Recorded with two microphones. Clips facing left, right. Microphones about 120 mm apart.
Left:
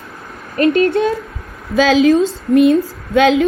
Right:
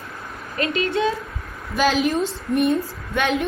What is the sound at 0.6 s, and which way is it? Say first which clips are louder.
Speech: left 9 dB; 50° left (ahead or behind).